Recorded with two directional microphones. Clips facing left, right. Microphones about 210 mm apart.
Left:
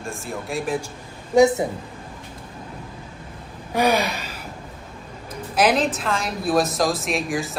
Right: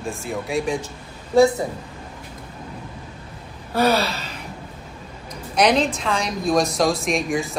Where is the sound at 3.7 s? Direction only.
15° left (ahead or behind).